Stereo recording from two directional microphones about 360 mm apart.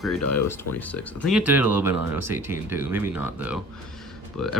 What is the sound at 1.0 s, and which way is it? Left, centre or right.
Speech, centre.